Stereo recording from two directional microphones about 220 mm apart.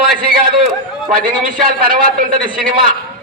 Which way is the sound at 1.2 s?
40° right (ahead or behind).